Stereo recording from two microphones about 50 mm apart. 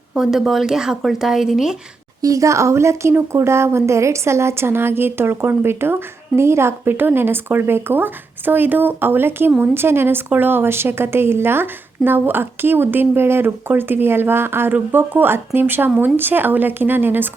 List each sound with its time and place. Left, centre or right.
0.1 s speech: centre
2.3 s a woman's voice: right
14.7 s speech: right